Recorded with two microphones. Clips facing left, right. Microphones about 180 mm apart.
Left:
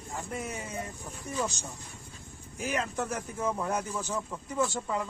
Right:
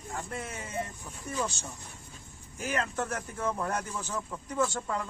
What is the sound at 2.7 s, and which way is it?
Speech, 10° left (ahead or behind).